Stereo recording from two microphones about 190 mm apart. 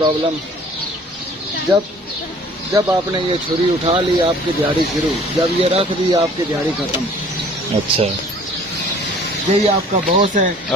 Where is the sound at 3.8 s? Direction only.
30° right (ahead or behind).